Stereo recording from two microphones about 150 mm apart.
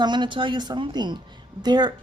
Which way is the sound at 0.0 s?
30° right (ahead or behind).